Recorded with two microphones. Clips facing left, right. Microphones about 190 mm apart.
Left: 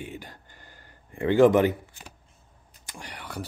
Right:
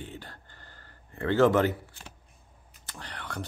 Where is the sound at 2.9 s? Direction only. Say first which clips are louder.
Left 1 dB; 10° left (ahead or behind).